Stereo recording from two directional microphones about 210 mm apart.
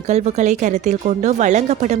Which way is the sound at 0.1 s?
35° right (ahead or behind).